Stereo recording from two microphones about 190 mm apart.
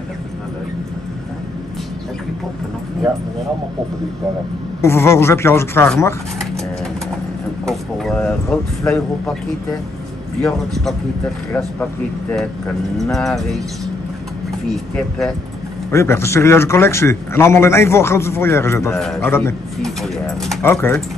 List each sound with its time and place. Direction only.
4.8 s a man's voice: 15° left (ahead or behind)
7.6 s a man's voice: centre (ahead or behind)
15.9 s a man's voice: 15° left (ahead or behind)
18.9 s speech: centre (ahead or behind)
19.2 s a man's voice: 15° left (ahead or behind)
20.6 s a man's voice: 10° left (ahead or behind)